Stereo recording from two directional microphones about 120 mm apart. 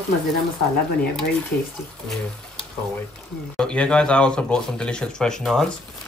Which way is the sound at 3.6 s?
10° left (ahead or behind).